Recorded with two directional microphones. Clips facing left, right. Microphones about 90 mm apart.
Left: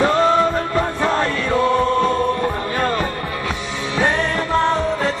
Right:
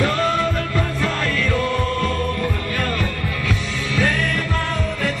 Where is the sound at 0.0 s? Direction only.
30° left (ahead or behind).